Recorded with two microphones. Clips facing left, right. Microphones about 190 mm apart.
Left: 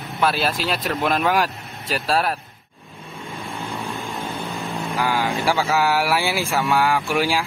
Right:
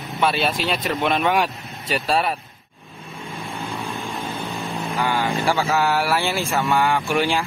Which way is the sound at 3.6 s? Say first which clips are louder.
Even; 15° right (ahead or behind).